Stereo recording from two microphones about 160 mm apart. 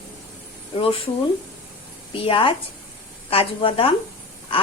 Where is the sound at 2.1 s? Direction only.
35° left (ahead or behind).